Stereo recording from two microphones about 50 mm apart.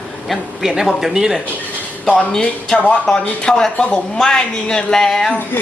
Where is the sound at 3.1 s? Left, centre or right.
Centre.